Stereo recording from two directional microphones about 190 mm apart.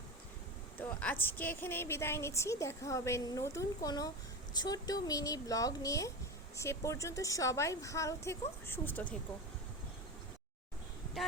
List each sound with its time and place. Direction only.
0.8 s a woman's voice: 5° left (ahead or behind)